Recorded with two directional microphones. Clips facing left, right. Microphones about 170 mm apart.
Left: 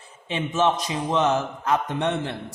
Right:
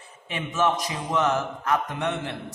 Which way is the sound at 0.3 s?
25° left (ahead or behind).